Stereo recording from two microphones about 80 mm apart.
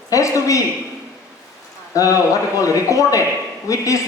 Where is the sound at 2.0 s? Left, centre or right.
Left.